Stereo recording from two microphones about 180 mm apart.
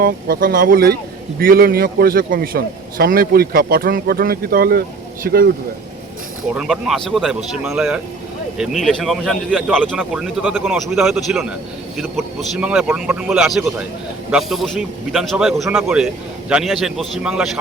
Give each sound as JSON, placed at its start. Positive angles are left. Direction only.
{"t": 0.0, "sound": "a man's voice", "side_deg": -55}
{"t": 6.6, "sound": "a man's voice", "side_deg": 0}